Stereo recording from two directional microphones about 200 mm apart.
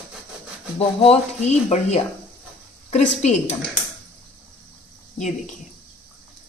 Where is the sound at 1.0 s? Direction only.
30° left (ahead or behind).